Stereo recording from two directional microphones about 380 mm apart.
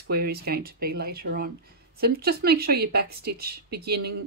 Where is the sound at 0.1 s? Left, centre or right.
Right.